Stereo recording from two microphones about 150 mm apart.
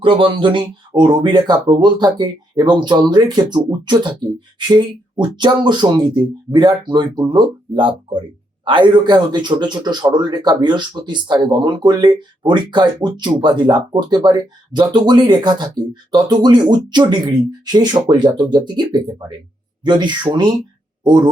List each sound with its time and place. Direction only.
0.0 s speech: 35° right (ahead or behind)